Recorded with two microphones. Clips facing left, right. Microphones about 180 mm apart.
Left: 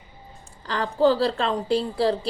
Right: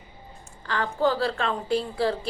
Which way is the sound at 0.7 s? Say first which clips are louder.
Left 4 dB; 35° left (ahead or behind).